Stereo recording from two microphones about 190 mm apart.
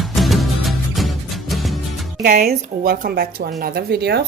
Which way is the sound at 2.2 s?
45° right (ahead or behind).